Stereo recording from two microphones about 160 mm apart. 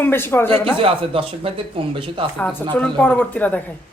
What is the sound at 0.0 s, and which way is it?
Speech, 15° left (ahead or behind).